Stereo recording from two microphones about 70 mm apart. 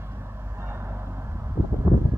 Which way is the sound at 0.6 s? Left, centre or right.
Right.